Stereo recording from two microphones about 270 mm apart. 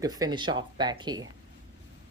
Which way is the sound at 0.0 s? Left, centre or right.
Centre.